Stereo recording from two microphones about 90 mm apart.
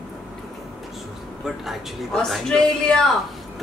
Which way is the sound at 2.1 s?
10° left (ahead or behind).